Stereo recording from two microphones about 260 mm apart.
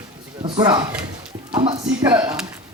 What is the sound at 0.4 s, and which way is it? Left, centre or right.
Speech, centre.